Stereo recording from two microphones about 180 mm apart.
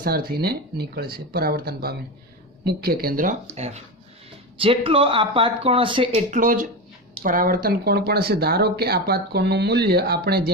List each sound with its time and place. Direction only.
0.0 s speech: 55° right (ahead or behind)
3.5 s speech: 35° right (ahead or behind)
6.1 s speech: 45° right (ahead or behind); by 10.5 s 60° right (ahead or behind)